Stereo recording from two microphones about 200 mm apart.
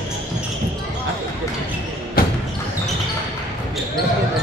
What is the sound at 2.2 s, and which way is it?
Basketball bounce, 50° left (ahead or behind).